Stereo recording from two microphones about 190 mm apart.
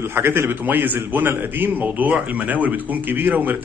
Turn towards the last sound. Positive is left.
turn(degrees=-10)  # may be behind; listen again after turning